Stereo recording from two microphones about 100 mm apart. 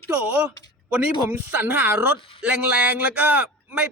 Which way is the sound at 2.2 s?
65° left (ahead or behind).